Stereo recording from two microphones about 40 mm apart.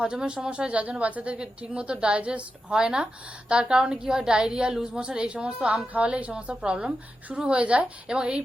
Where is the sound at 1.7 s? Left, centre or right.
Right.